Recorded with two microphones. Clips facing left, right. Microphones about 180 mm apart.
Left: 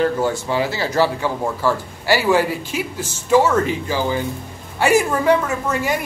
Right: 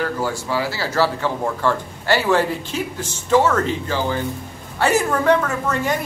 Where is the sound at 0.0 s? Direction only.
20° left (ahead or behind).